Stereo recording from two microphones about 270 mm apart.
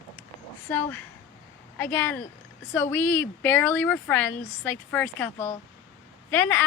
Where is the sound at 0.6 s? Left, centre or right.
Centre.